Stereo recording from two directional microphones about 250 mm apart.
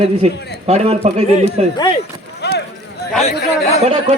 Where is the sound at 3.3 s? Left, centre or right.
Left.